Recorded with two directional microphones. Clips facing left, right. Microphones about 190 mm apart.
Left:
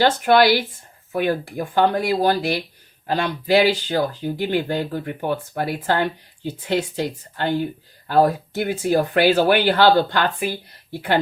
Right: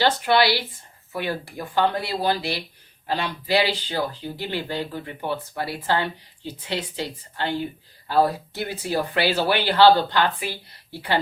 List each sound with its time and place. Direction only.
0.0 s speech: 50° left (ahead or behind)